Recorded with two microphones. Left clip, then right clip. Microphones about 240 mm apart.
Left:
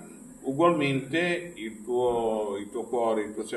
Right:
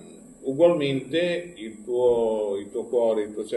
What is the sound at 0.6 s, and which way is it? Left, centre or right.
Speech, centre.